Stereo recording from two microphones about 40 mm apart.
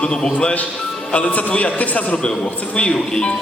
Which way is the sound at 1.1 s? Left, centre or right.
Left.